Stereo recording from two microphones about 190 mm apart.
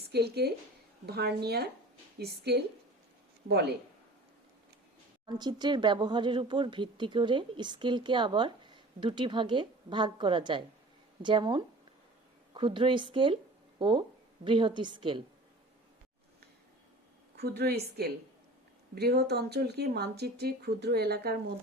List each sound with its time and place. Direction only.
0.0 s a woman's voice: 60° right (ahead or behind)
5.2 s speech: 20° right (ahead or behind)
18.9 s speech: 60° right (ahead or behind)